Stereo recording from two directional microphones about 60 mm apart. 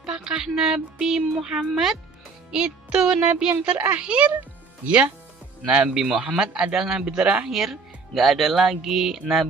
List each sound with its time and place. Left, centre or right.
0.0 s speech: centre
2.5 s speech: centre
7.4 s speech: centre